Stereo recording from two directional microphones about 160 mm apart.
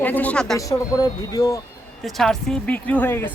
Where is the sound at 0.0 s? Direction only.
10° left (ahead or behind).